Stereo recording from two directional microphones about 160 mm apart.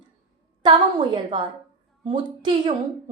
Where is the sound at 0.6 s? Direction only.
30° right (ahead or behind).